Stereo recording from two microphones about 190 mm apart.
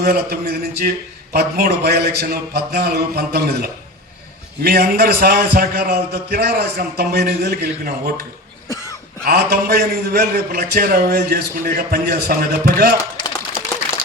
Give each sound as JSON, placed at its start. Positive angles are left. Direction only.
{"t": 0.0, "sound": "a man's voice", "side_deg": -55}
{"t": 9.2, "sound": "a man's voice", "side_deg": -55}